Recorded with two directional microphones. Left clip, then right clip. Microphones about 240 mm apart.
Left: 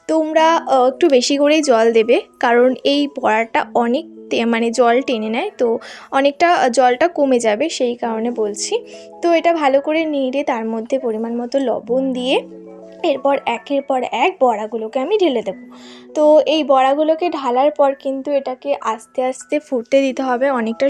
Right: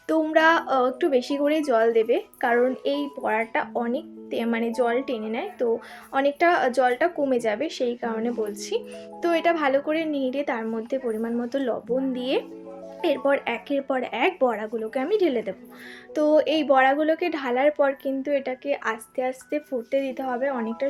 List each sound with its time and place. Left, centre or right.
0.1 s a woman's voice: left